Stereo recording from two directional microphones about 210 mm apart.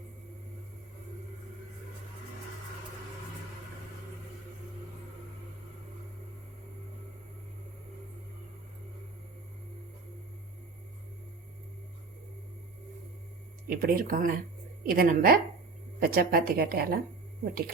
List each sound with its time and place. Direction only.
13.7 s speech: 40° right (ahead or behind)